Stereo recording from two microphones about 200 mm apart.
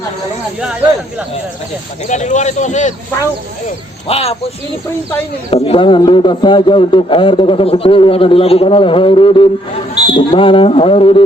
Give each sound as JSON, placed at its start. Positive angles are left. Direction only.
{"t": 2.0, "sound": "speech", "side_deg": 35}
{"t": 4.1, "sound": "a man's voice", "side_deg": 30}
{"t": 5.5, "sound": "a man's voice", "side_deg": 30}